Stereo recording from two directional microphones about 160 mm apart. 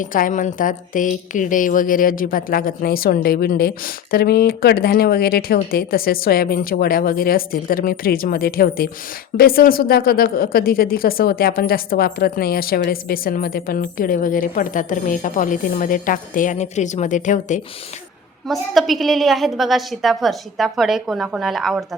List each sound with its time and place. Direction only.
0.0 s a woman's voice: 55° left (ahead or behind)
18.4 s a woman's voice: centre (ahead or behind)